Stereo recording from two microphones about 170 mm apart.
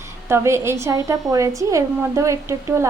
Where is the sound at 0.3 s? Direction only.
15° right (ahead or behind).